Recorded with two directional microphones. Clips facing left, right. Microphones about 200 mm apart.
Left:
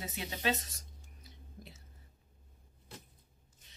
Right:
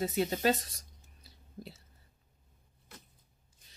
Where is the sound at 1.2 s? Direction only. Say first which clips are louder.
Right 6 dB; 35° right (ahead or behind).